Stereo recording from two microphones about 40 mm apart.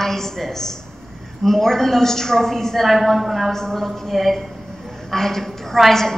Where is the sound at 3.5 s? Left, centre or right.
Centre.